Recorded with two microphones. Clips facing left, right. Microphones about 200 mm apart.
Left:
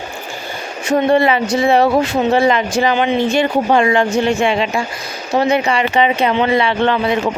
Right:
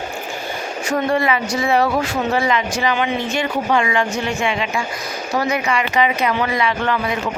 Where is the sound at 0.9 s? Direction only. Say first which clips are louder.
Left 6 dB; 25° left (ahead or behind).